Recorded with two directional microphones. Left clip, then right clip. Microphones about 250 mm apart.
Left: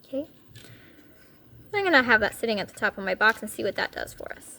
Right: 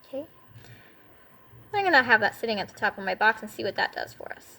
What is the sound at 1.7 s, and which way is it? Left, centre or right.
A woman's voice, left.